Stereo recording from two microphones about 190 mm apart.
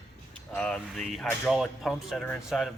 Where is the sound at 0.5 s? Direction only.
5° left (ahead or behind).